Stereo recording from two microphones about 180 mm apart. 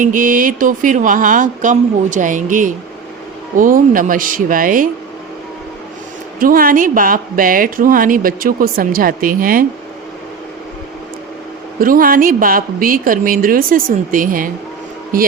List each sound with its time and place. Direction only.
0.0 s a woman's voice: 50° right (ahead or behind)
6.4 s a woman's voice: 50° right (ahead or behind)
11.8 s a woman's voice: 50° right (ahead or behind)